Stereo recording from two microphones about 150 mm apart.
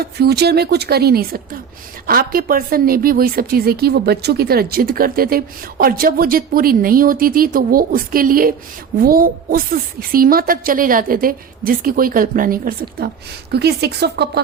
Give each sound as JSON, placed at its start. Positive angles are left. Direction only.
{"t": 0.0, "sound": "speech", "side_deg": -90}
{"t": 2.0, "sound": "a woman's voice", "side_deg": -80}
{"t": 13.5, "sound": "speech", "side_deg": -90}